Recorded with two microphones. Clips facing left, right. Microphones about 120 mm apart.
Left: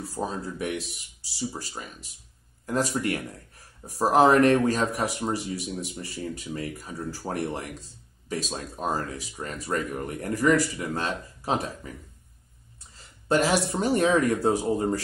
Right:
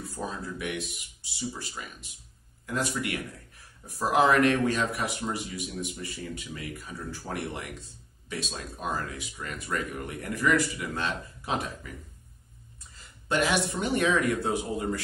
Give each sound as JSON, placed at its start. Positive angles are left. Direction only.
{"t": 0.0, "sound": "speech", "side_deg": 35}
{"t": 13.3, "sound": "speech", "side_deg": 35}